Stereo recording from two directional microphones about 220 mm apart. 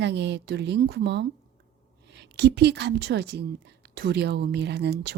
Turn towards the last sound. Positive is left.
turn(degrees=-50)  # may be behind; listen again after turning